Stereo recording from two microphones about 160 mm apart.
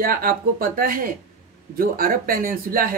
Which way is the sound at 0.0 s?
65° right (ahead or behind).